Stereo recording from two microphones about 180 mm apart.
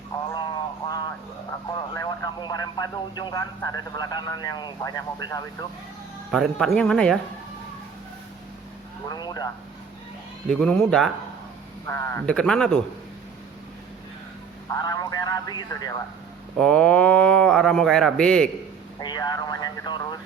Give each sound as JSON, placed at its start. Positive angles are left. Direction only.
{"t": 0.3, "sound": "a sound", "side_deg": 25}
{"t": 2.0, "sound": "speech", "side_deg": 20}
{"t": 6.3, "sound": "speech", "side_deg": 5}
{"t": 9.0, "sound": "a sound", "side_deg": 20}
{"t": 10.5, "sound": "speech", "side_deg": 5}
{"t": 11.9, "sound": "speech", "side_deg": 15}
{"t": 12.2, "sound": "speech", "side_deg": 5}
{"t": 14.7, "sound": "speech", "side_deg": 20}
{"t": 16.6, "sound": "speech", "side_deg": 5}
{"t": 18.9, "sound": "vehicle", "side_deg": 20}